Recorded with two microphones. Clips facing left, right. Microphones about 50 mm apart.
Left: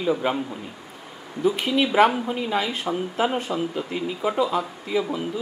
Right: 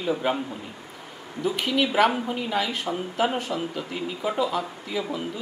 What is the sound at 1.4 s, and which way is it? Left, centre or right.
Speech, left.